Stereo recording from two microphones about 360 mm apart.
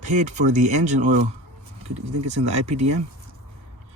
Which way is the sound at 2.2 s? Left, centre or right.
Centre.